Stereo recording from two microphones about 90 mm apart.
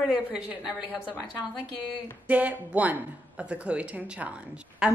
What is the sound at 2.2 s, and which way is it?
Speech, 15° right (ahead or behind).